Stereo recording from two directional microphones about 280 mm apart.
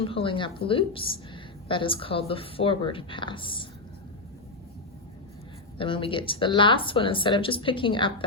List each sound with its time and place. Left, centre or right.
0.0 s a woman's voice: centre
5.7 s speech: centre